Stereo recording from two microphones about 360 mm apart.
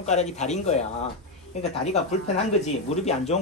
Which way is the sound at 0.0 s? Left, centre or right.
Centre.